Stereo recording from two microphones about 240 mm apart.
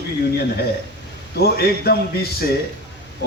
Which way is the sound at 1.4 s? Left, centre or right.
Left.